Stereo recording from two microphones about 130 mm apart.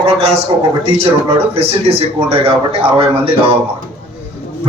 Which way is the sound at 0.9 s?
50° right (ahead or behind).